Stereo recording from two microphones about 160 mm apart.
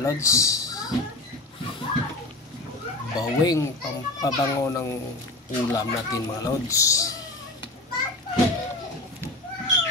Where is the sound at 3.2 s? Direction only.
25° left (ahead or behind).